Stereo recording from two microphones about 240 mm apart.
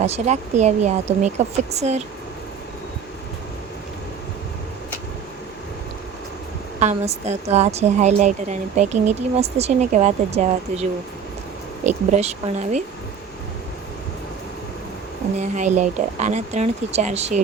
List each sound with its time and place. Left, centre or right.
0.0 s a woman's voice: right
6.7 s a woman's voice: right
11.9 s a woman's voice: right
15.4 s a woman's voice: right